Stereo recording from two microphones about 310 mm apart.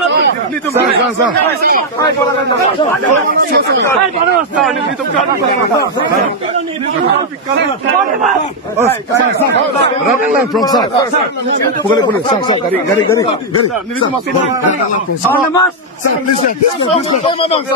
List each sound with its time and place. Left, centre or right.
3.1 s speech: right
10.6 s speech: centre
11.9 s speech: centre